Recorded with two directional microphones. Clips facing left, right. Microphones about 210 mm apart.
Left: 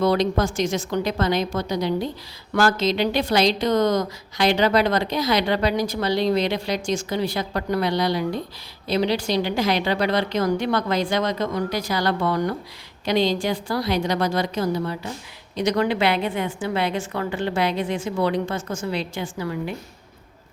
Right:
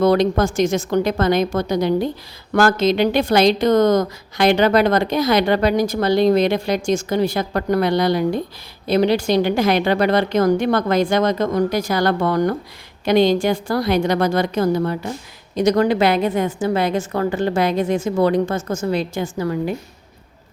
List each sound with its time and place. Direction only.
0.0 s a woman's voice: 50° right (ahead or behind)